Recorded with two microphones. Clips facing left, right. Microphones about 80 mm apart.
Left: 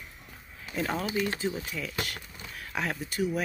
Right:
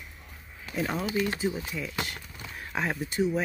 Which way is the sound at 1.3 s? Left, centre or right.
Centre.